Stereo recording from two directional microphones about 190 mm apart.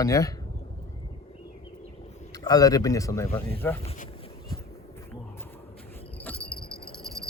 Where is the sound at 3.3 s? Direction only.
30° left (ahead or behind).